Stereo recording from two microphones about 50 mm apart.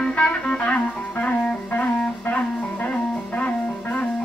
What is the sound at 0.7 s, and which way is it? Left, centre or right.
Music, left.